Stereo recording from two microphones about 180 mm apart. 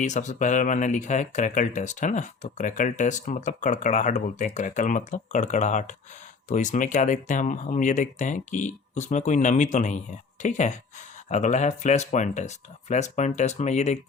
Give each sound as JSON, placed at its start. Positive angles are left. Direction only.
{"t": 0.0, "sound": "speech", "side_deg": 40}